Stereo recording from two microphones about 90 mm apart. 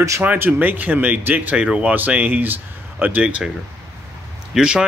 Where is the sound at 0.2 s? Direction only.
15° right (ahead or behind).